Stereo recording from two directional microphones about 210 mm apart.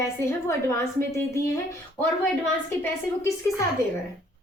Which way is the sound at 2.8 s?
10° left (ahead or behind).